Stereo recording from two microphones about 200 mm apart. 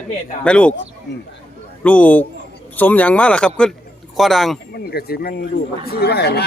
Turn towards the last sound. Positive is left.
turn(degrees=55)  # may be behind; listen again after turning